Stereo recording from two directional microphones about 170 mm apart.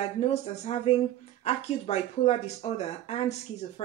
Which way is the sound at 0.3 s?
40° left (ahead or behind).